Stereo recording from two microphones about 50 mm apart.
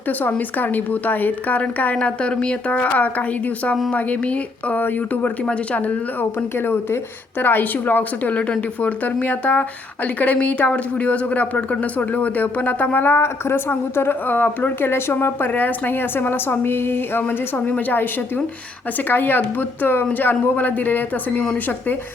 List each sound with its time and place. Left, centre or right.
0.1 s a woman's voice: left; by 2.6 s centre
2.6 s a woman's voice: left
4.8 s a woman's voice: left
6.6 s a woman's voice: left
14.3 s speech: left
15.4 s a woman's voice: left